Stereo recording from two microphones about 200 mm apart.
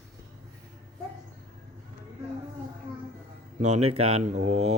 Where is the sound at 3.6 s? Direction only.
35° right (ahead or behind).